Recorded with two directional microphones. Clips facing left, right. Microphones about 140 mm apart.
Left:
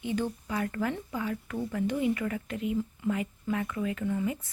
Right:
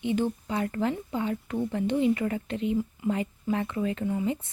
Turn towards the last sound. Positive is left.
turn(degrees=-25)  # may be behind; listen again after turning